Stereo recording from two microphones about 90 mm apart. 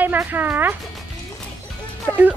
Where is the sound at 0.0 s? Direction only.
20° right (ahead or behind).